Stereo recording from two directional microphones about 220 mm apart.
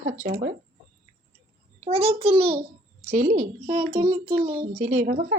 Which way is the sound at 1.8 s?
25° right (ahead or behind).